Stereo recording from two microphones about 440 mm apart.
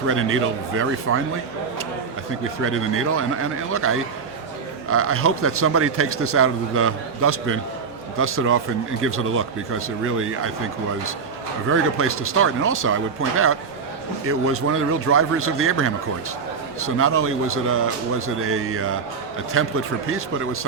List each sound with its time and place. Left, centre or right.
0.1 s a man's voice: right
2.6 s a man's voice: right
11.7 s a man's voice: right